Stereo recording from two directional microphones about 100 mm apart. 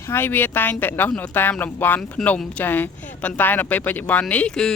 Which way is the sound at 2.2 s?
Centre (ahead or behind).